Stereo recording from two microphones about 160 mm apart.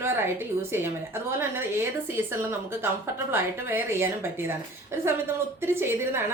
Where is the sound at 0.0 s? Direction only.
15° right (ahead or behind).